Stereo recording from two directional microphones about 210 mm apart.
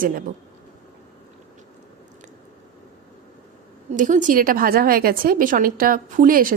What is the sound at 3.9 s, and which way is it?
A woman's voice, 35° right (ahead or behind).